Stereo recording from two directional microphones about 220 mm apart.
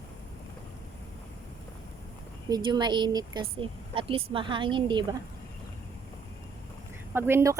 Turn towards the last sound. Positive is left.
turn(degrees=-10)  # may be behind; listen again after turning